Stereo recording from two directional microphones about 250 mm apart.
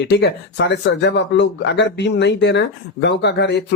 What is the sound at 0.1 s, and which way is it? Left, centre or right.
Speech, left.